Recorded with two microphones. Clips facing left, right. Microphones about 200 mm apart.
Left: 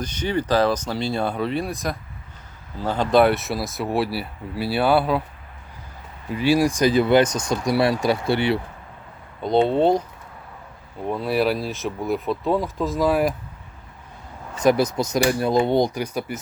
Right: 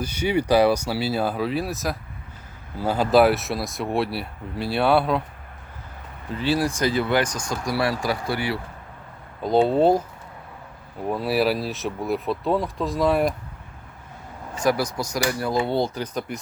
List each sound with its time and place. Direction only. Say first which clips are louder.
0.0 s speech: right 1 dB; 10° right (ahead or behind)
6.3 s speech: left 4 dB; 10° left (ahead or behind)
9.4 s speech: even; 5° right (ahead or behind)
11.0 s speech: even; 5° right (ahead or behind)
14.6 s speech: left 4 dB; 20° left (ahead or behind)